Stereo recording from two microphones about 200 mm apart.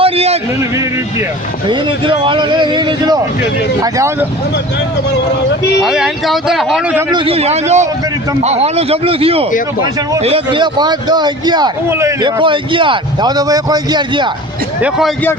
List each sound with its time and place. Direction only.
0.0 s a sound: 30° right (ahead or behind)
1.6 s a man's voice: 25° right (ahead or behind)
5.8 s speech: centre (ahead or behind)
7.1 s a man's voice: 25° right (ahead or behind)
14.8 s speech: 5° right (ahead or behind)